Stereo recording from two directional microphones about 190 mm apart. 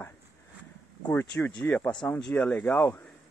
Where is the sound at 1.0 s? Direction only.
10° left (ahead or behind).